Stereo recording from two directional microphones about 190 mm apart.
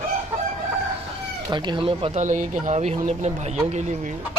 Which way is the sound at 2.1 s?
40° right (ahead or behind).